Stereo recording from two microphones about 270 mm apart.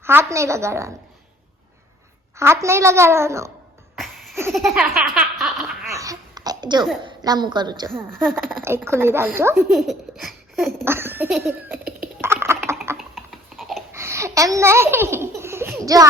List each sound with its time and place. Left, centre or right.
0.0 s a woman's voice: centre
2.4 s a woman's voice: centre
3.9 s baby laughter: centre
5.9 s babbling: centre
7.0 s a woman's voice: centre
8.2 s speech: centre
8.6 s a woman's voice: centre
12.2 s a sound: centre
12.6 s typing: centre
13.1 s a sound: centre
13.9 s baby laughter: centre